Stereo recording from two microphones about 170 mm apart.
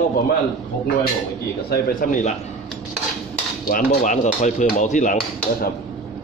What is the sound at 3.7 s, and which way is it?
Speech, 50° left (ahead or behind).